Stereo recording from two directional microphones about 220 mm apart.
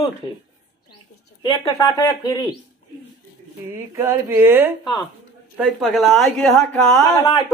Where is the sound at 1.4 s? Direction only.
15° left (ahead or behind).